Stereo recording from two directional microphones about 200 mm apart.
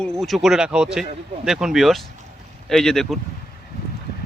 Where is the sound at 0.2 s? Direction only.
Centre (ahead or behind).